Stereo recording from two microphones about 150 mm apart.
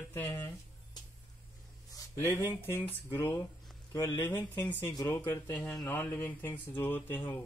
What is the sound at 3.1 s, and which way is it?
Speech, 15° left (ahead or behind).